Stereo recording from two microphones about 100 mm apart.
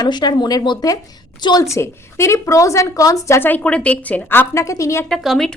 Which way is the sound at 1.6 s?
30° left (ahead or behind).